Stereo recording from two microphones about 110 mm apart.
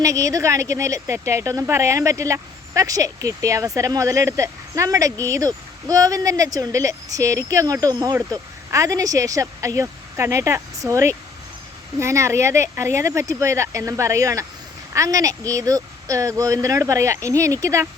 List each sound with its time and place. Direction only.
0.0 s speech: 30° right (ahead or behind)